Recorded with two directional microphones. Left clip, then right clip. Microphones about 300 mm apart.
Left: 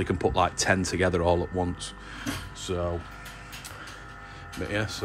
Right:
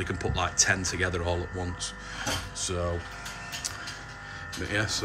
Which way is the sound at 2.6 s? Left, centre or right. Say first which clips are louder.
Left 3 dB; centre.